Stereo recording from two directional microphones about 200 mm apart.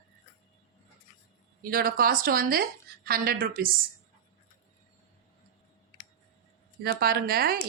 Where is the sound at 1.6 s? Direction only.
45° right (ahead or behind).